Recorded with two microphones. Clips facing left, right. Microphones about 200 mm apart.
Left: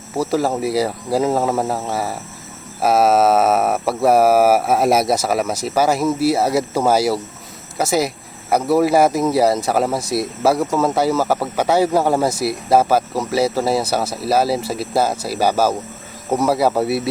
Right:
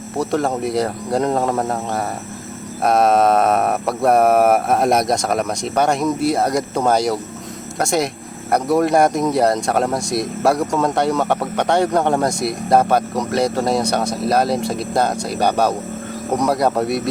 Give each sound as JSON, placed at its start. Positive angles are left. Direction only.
{"t": 0.2, "sound": "speech", "side_deg": 5}